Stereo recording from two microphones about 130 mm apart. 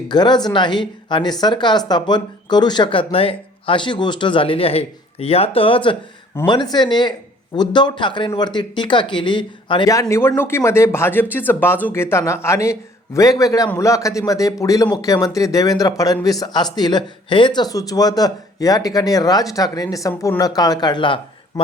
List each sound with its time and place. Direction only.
0.1 s speech: 35° left (ahead or behind)
9.9 s speech: 25° left (ahead or behind)